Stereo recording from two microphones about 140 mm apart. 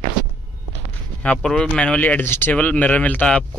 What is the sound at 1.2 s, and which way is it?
Speech, 5° left (ahead or behind).